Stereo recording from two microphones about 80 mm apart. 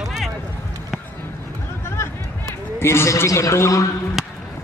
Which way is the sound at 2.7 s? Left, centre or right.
Left.